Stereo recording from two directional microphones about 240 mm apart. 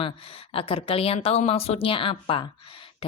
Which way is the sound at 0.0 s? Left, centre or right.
Left.